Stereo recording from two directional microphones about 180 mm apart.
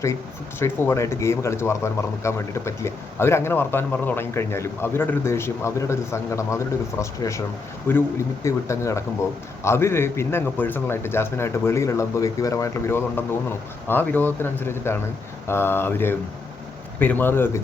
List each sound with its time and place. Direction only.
0.6 s speech: 15° left (ahead or behind)